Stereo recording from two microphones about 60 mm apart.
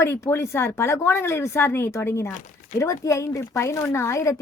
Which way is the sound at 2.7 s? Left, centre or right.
Left.